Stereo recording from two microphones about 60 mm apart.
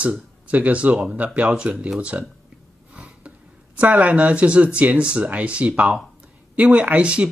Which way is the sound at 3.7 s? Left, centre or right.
Right.